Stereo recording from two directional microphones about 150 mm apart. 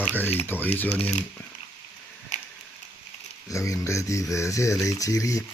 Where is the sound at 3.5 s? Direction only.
20° left (ahead or behind).